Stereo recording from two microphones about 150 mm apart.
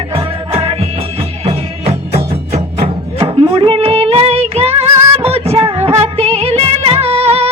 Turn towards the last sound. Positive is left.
turn(degrees=-40)  # may be behind; listen again after turning